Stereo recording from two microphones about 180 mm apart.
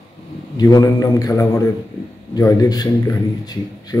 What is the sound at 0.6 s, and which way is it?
A man's voice, 20° left (ahead or behind).